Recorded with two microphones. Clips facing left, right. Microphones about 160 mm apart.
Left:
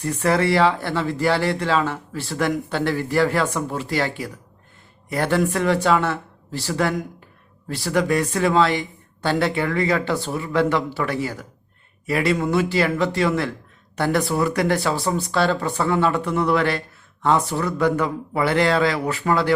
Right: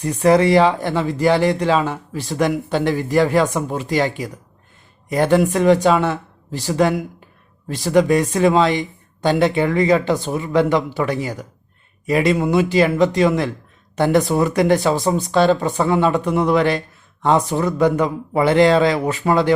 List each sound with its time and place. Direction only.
0.0 s a man's voice: 20° right (ahead or behind)